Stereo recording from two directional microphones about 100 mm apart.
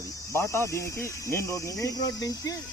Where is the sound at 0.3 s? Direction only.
25° left (ahead or behind).